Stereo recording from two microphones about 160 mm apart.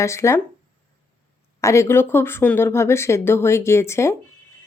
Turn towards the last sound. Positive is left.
turn(degrees=15)  # may be behind; listen again after turning